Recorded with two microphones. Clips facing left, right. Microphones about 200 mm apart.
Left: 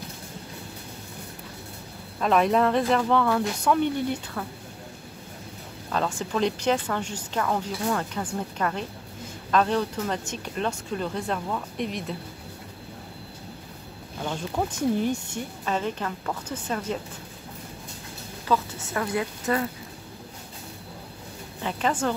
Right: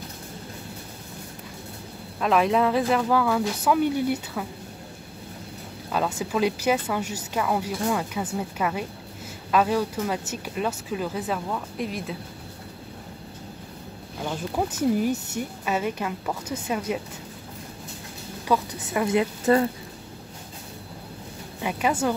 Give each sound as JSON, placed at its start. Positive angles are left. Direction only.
{"t": 2.1, "sound": "speech", "side_deg": 0}
{"t": 5.9, "sound": "speech", "side_deg": -5}
{"t": 14.2, "sound": "speech", "side_deg": -5}
{"t": 18.5, "sound": "speech", "side_deg": -15}
{"t": 19.5, "sound": "speech", "side_deg": -30}
{"t": 21.5, "sound": "speech", "side_deg": -10}